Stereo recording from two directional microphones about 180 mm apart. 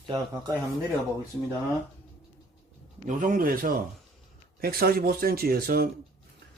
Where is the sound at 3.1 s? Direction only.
45° right (ahead or behind).